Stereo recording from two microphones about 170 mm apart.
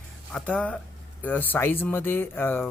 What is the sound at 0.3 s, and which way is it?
Speech, 10° left (ahead or behind).